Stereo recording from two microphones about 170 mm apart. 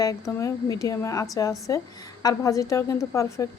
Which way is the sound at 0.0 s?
20° left (ahead or behind).